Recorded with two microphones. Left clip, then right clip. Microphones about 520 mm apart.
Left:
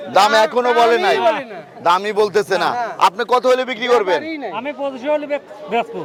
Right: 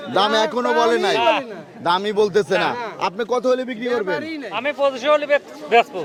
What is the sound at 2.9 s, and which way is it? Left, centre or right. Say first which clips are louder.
A man's voice: left 7 dB; centre.